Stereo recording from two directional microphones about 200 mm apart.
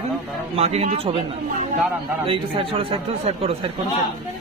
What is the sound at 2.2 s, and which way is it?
Speech, 25° right (ahead or behind).